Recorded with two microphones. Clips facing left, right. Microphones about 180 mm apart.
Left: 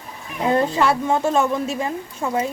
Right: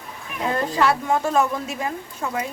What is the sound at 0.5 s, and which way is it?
Speech, 25° left (ahead or behind).